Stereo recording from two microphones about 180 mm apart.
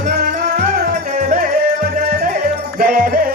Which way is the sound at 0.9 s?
50° right (ahead or behind).